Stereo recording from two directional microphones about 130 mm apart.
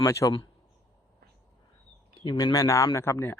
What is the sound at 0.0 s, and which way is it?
Speech, 25° left (ahead or behind).